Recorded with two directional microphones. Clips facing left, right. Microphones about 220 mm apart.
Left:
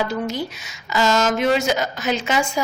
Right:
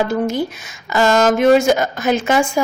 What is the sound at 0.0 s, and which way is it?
A woman's voice, 50° right (ahead or behind).